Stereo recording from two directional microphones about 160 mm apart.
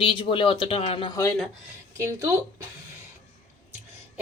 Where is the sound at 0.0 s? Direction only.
30° left (ahead or behind).